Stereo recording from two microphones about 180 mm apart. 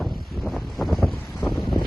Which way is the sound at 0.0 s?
Centre (ahead or behind).